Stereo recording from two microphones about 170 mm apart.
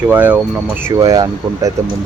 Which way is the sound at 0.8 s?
20° right (ahead or behind).